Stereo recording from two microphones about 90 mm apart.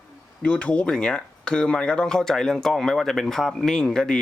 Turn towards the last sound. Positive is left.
turn(degrees=10)  # may be behind; listen again after turning